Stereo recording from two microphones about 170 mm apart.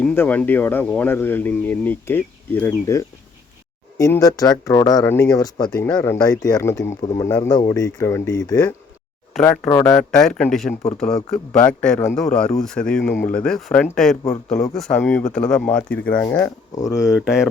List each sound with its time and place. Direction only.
0.0 s speech: 10° left (ahead or behind)
9.9 s speech: 5° left (ahead or behind); by 17.1 s 20° left (ahead or behind)
17.1 s speech: centre (ahead or behind)